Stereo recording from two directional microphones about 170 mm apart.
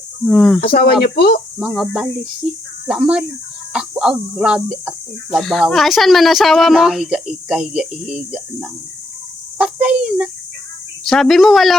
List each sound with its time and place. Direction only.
0.3 s speech: centre (ahead or behind)
0.7 s speech: 60° left (ahead or behind)
1.5 s speech: centre (ahead or behind)
9.6 s a sound: 10° right (ahead or behind)
11.0 s speech: centre (ahead or behind)